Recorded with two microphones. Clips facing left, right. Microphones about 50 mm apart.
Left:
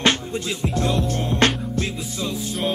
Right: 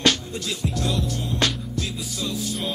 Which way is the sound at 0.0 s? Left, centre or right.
Left.